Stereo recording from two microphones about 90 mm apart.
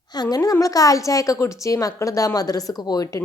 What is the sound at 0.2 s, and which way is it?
A woman's voice, 45° left (ahead or behind).